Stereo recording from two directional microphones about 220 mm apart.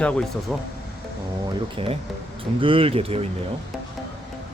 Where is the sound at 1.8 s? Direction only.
25° right (ahead or behind).